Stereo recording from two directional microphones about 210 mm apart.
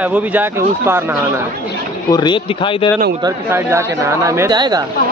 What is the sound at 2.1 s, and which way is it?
Speech, 20° left (ahead or behind).